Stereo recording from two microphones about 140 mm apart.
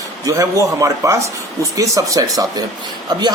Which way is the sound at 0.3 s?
25° right (ahead or behind).